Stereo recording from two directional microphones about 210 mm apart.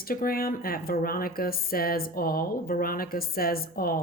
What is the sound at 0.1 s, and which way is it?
A woman's voice, 45° left (ahead or behind).